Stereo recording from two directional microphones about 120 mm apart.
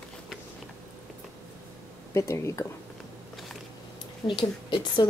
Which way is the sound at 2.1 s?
25° left (ahead or behind).